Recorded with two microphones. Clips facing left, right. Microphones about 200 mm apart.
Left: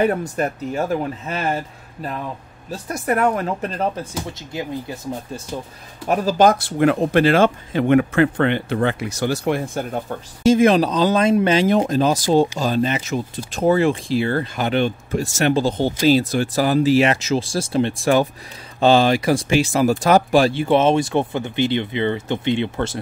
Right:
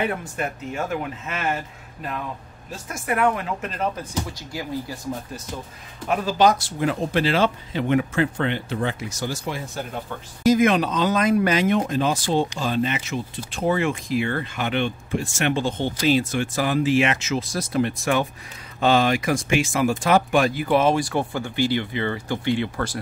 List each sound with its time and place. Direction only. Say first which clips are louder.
0.0 s speech: left 7 dB; 40° left (ahead or behind)
4.3 s speech: left 3 dB; 20° left (ahead or behind)
6.0 s speech: left 4 dB; 45° left (ahead or behind)
10.4 s speech: left 4 dB; 30° left (ahead or behind)